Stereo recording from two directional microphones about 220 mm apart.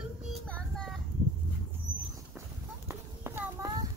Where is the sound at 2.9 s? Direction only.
10° right (ahead or behind).